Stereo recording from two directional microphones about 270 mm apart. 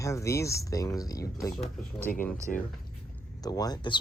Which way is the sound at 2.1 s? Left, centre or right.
Left.